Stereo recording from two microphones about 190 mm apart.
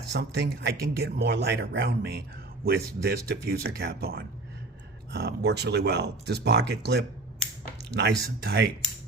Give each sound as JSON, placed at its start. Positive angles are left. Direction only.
{"t": 0.1, "sound": "speech", "side_deg": -60}